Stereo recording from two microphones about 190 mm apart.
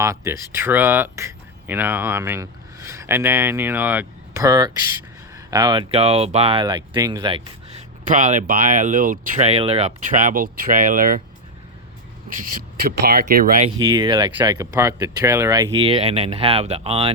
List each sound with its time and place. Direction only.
0.0 s speech: 15° right (ahead or behind)
8.0 s speech: 40° right (ahead or behind)
12.3 s speech: 45° right (ahead or behind)
13.7 s speech: 25° right (ahead or behind)